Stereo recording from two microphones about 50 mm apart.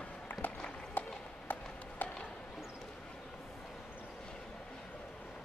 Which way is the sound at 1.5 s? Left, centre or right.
Left.